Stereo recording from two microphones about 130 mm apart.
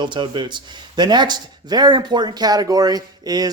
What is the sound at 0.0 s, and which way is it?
Speech, 35° right (ahead or behind).